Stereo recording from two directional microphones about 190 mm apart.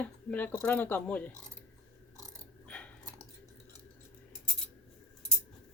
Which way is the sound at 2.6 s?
5° left (ahead or behind).